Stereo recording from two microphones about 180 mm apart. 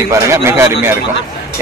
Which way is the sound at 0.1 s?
15° right (ahead or behind).